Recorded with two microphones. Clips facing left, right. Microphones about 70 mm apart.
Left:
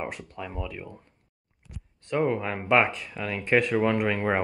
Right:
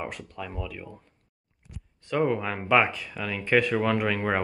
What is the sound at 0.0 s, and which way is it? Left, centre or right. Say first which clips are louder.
Speech: left 1 dB; centre.